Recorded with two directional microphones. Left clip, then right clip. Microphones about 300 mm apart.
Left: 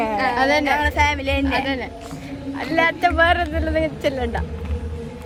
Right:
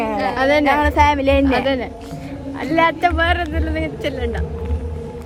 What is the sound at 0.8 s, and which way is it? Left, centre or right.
A woman's voice, right.